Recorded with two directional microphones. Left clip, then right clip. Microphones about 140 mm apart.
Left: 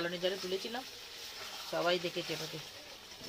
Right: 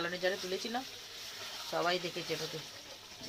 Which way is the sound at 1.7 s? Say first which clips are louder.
Even; 10° right (ahead or behind).